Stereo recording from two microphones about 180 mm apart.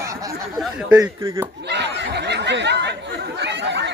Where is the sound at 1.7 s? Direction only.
70° right (ahead or behind).